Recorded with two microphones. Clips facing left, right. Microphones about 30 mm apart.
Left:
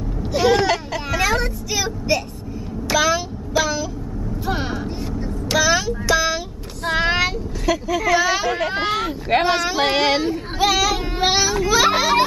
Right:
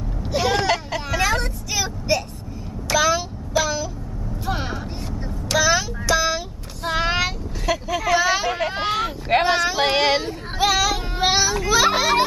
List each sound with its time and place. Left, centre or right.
0.2 s vehicle: centre
2.9 s a sound: centre
5.5 s child singing: centre
7.6 s speech: centre